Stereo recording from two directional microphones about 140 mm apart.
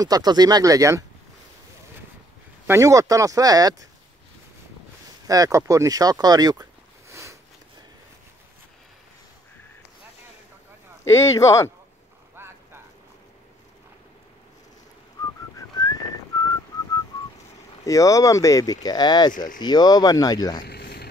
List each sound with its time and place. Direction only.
0.0 s speech: 30° right (ahead or behind)
2.6 s speech: 20° right (ahead or behind)
5.2 s speech: 25° right (ahead or behind)
6.2 s a sound: 30° right (ahead or behind)
11.1 s speech: 20° left (ahead or behind)
12.4 s vehicle: 15° right (ahead or behind)
15.5 s whistling: 25° left (ahead or behind)
17.8 s speech: 25° left (ahead or behind)